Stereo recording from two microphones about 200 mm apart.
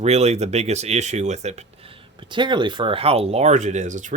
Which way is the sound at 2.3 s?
25° right (ahead or behind).